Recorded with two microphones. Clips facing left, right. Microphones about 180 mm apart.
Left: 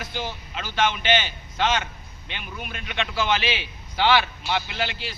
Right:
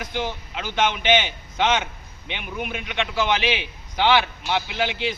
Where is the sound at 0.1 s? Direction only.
20° right (ahead or behind).